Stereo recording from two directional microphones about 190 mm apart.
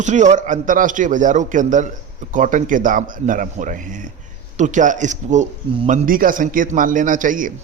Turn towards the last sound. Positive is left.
turn(degrees=-45)  # may be behind; listen again after turning